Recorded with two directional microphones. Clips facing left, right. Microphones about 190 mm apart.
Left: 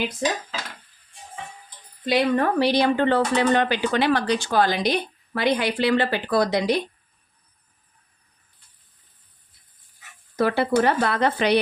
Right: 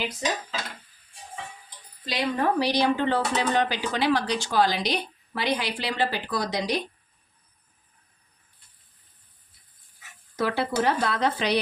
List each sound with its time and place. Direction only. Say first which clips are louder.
2.0 s speech: left 5 dB; 55° left (ahead or behind)
10.3 s speech: left 5 dB; 55° left (ahead or behind)